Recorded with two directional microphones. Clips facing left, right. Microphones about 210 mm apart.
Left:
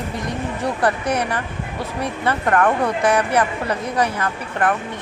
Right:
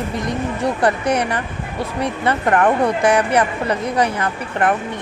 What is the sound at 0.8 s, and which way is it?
A woman's voice, 15° right (ahead or behind).